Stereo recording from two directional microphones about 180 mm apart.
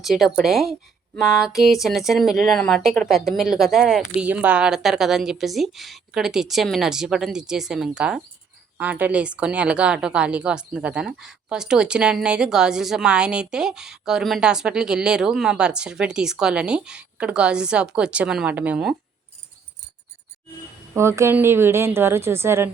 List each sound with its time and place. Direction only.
0.0 s a woman's voice: centre (ahead or behind)
20.9 s a woman's voice: 15° right (ahead or behind)